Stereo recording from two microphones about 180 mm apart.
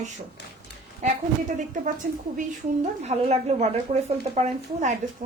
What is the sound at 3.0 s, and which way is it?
Speech, 35° right (ahead or behind).